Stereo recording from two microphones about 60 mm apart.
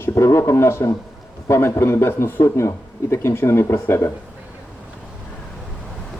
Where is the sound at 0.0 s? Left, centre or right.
Left.